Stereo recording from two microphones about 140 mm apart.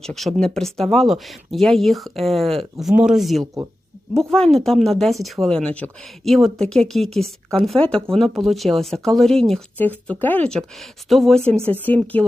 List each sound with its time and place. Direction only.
0.0 s speech: centre (ahead or behind)
3.4 s speech: 25° right (ahead or behind)
4.1 s speech: centre (ahead or behind)
11.7 s speech: 10° left (ahead or behind)